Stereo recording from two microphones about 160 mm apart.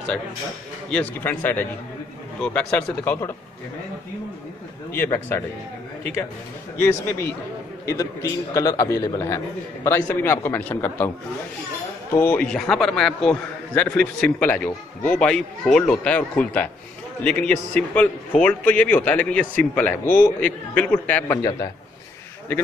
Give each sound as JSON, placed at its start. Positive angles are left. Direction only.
{"t": 0.8, "sound": "a man's voice", "side_deg": 5}
{"t": 4.9, "sound": "a man's voice", "side_deg": 10}
{"t": 6.8, "sound": "a man's voice", "side_deg": 15}
{"t": 12.1, "sound": "a man's voice", "side_deg": 15}